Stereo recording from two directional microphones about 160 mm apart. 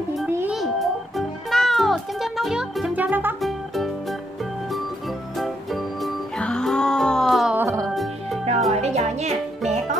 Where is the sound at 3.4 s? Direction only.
Centre (ahead or behind).